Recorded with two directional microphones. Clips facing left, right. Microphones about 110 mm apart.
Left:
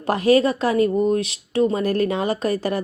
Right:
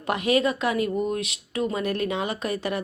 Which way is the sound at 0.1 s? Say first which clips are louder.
Left 6 dB; 35° left (ahead or behind).